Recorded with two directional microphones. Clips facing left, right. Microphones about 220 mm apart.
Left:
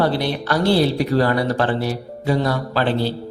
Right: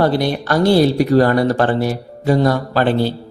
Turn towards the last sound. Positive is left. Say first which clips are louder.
# right 4 dB
turn(degrees=-50)  # may be behind; listen again after turning